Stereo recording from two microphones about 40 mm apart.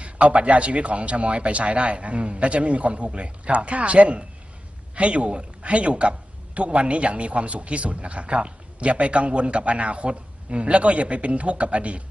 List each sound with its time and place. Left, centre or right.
0.0 s a man's voice: right